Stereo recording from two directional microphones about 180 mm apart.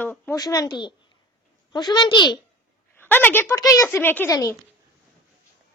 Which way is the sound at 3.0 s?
10° left (ahead or behind).